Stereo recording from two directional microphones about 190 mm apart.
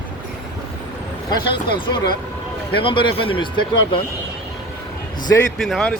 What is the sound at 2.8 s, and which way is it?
Speech, 25° left (ahead or behind).